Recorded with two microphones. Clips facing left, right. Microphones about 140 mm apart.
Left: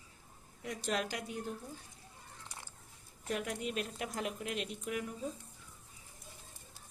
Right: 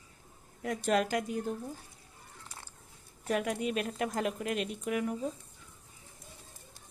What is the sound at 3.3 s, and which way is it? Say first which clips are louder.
Speech: right 6 dB; 70° right (ahead or behind).